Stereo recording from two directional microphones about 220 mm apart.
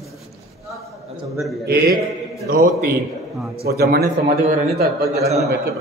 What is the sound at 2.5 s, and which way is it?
A man's voice, 45° right (ahead or behind).